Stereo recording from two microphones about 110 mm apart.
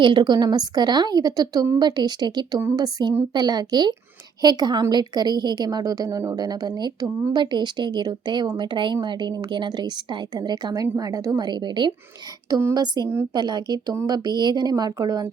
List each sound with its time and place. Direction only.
0.0 s a woman's voice: 45° right (ahead or behind)